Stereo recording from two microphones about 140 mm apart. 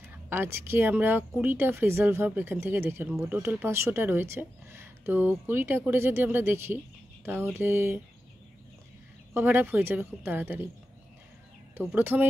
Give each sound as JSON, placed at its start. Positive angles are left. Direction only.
{"t": 0.3, "sound": "speech", "side_deg": -15}
{"t": 9.3, "sound": "speech", "side_deg": -15}
{"t": 11.7, "sound": "speech", "side_deg": -15}